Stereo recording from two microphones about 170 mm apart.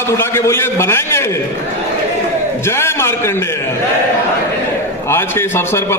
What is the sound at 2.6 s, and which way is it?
Speech, 15° left (ahead or behind).